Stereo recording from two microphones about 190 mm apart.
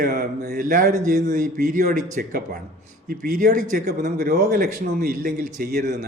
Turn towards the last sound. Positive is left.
turn(degrees=-55)  # may be behind; listen again after turning